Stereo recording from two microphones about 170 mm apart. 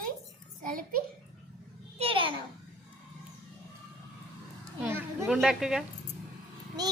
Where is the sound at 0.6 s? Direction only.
55° right (ahead or behind).